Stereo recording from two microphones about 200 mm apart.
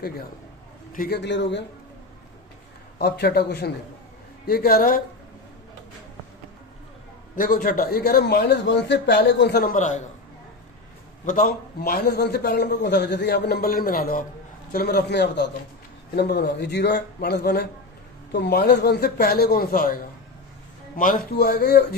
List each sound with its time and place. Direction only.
0.9 s a man's voice: 50° left (ahead or behind)
3.0 s a man's voice: 55° left (ahead or behind)
7.3 s a man's voice: 45° left (ahead or behind)
11.3 s a man's voice: 45° left (ahead or behind)